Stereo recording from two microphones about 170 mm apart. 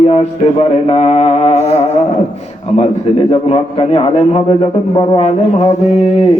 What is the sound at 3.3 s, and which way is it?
A man's voice, 35° left (ahead or behind).